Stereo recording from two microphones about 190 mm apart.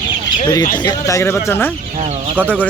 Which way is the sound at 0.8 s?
20° left (ahead or behind).